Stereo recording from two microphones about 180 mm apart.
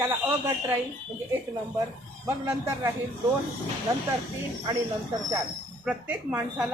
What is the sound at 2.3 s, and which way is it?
Speech, 15° right (ahead or behind).